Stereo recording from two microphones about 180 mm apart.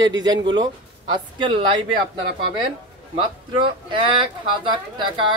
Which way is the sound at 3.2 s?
25° right (ahead or behind).